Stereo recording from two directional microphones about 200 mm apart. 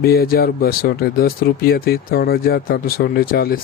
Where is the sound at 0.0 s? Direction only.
50° left (ahead or behind).